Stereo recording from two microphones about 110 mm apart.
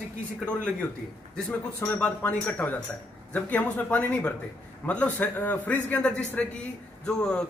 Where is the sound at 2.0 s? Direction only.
10° left (ahead or behind).